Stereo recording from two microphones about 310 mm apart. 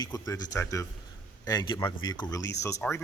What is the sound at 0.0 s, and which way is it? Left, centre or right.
Speech, centre.